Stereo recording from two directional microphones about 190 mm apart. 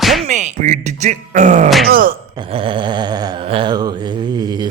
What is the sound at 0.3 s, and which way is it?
Speech, 40° right (ahead or behind).